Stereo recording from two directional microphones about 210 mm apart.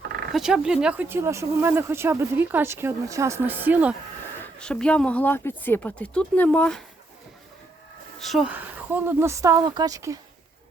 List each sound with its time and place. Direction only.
0.3 s speech: 5° right (ahead or behind)
4.6 s speech: 5° left (ahead or behind)
8.2 s speech: centre (ahead or behind); by 10.2 s 15° right (ahead or behind)